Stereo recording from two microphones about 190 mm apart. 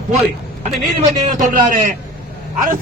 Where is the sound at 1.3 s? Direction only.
45° right (ahead or behind).